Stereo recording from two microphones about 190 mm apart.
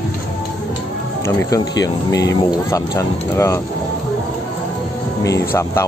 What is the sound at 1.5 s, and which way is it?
Speech, 20° left (ahead or behind).